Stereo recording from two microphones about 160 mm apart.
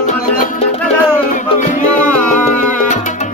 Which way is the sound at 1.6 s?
55° left (ahead or behind).